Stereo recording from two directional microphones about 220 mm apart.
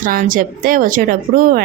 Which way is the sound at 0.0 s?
40° right (ahead or behind).